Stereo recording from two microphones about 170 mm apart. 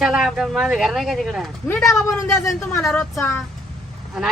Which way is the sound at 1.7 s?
15° left (ahead or behind).